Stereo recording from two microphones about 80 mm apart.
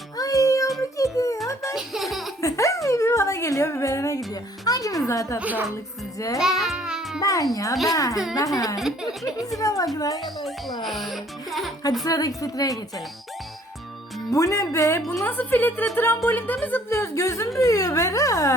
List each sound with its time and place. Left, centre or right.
0.2 s music: left
0.8 s a sound: left
1.7 s music: centre
2.4 s a sound: left
4.6 s a woman's voice: left
5.4 s speech: centre
6.1 s a woman's voice: left
6.4 s music: centre
7.2 s a woman's voice: left
10.8 s speech: centre
12.0 s a woman's voice: left
14.3 s speech: left
15.3 s a woman's voice: left
16.9 s a woman's voice: left